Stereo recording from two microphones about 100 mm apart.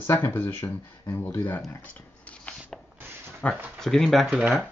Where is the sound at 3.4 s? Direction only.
15° left (ahead or behind).